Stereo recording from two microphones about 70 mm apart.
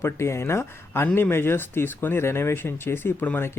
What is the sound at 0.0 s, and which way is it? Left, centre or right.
Speech, left.